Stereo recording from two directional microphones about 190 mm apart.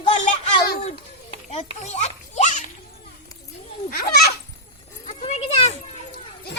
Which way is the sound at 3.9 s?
50° left (ahead or behind).